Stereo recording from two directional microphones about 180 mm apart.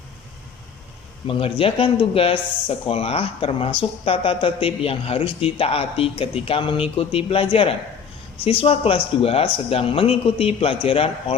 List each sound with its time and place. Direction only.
1.3 s speech: 30° left (ahead or behind)